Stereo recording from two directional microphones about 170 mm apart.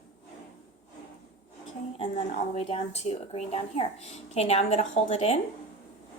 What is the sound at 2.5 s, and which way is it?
Speech, 40° left (ahead or behind).